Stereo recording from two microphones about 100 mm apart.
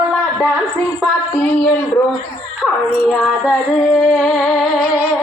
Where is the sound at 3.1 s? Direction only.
5° left (ahead or behind).